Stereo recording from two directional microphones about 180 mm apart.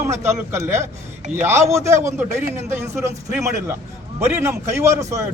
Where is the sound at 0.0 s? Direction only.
15° right (ahead or behind).